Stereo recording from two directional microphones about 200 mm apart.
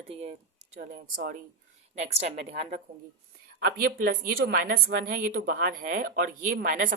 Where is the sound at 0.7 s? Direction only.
40° right (ahead or behind).